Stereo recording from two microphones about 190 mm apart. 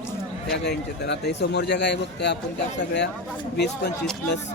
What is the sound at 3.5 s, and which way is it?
Speech, 60° left (ahead or behind).